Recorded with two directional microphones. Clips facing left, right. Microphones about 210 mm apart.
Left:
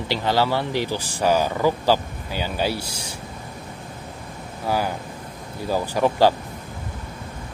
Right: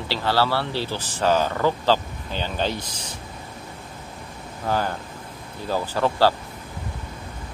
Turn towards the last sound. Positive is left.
turn(degrees=15)  # may be behind; listen again after turning